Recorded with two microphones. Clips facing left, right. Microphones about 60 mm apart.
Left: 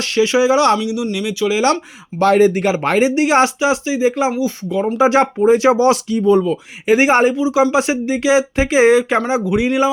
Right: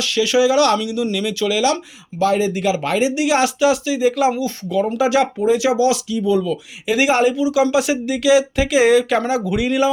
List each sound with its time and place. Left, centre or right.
0.0 s speech: left
0.8 s speech: centre
2.1 s speech: left; by 4.9 s centre
4.9 s speech: left